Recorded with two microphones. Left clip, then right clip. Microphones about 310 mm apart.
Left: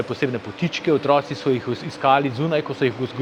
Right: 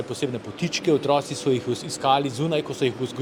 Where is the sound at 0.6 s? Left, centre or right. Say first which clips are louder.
Left 1 dB; centre.